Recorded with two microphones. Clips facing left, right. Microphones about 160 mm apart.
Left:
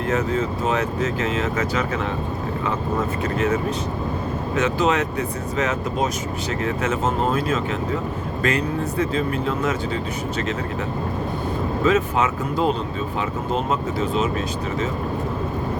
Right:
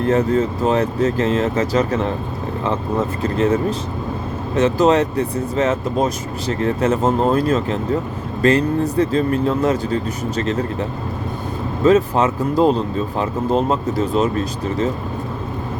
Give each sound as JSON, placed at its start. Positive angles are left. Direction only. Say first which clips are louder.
{"t": 0.1, "sound": "speech", "louder": "right 5 dB", "side_deg": -35}
{"t": 3.2, "sound": "speech", "louder": "right 6 dB", "side_deg": -30}
{"t": 11.9, "sound": "speech", "louder": "right 6 dB", "side_deg": -35}